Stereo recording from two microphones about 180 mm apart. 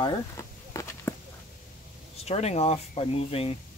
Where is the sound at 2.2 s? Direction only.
35° left (ahead or behind).